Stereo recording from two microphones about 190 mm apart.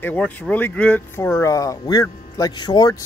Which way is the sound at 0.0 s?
10° left (ahead or behind).